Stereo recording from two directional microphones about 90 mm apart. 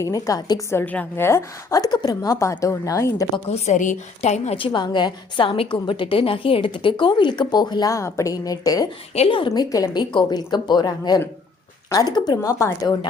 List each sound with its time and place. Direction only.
0.0 s speech: 40° left (ahead or behind)
0.7 s a woman's voice: 20° left (ahead or behind)
1.7 s a woman's voice: 50° left (ahead or behind)
4.5 s a woman's voice: 65° left (ahead or behind)
5.5 s a woman's voice: 85° left; by 7.9 s 50° left (ahead or behind)
7.9 s a woman's voice: 35° left (ahead or behind)
9.2 s a woman's voice: 75° left (ahead or behind)
9.6 s a woman's voice: 45° left (ahead or behind)